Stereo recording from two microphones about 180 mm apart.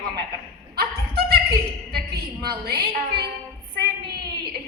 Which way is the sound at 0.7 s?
60° right (ahead or behind).